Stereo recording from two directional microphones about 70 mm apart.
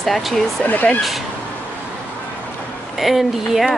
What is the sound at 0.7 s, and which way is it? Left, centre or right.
Speech, left.